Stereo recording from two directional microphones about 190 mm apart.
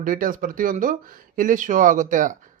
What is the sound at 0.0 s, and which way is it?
Speech, 45° right (ahead or behind).